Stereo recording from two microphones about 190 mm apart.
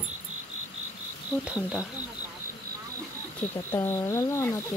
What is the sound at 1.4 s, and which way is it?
Speech, 5° right (ahead or behind).